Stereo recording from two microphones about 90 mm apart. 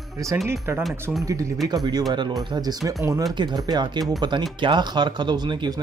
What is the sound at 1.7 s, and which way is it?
Speech, 45° right (ahead or behind).